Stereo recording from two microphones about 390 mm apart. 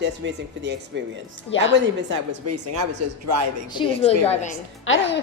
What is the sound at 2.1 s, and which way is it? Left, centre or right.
Speech, right.